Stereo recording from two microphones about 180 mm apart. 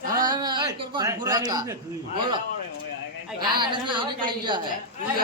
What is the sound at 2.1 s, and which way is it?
Speech, 25° right (ahead or behind).